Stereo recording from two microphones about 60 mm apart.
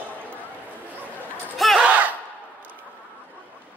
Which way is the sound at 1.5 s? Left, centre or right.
Centre.